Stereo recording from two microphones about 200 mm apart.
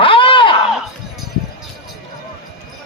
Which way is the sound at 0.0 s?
25° left (ahead or behind).